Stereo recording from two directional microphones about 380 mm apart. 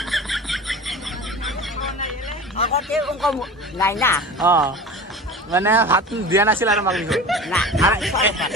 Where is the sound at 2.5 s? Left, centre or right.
Centre.